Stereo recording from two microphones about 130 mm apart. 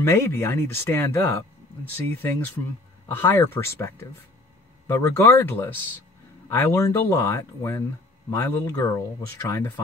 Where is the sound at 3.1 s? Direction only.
15° left (ahead or behind).